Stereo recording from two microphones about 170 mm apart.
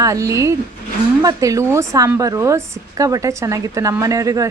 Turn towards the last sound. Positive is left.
turn(degrees=-20)  # may be behind; listen again after turning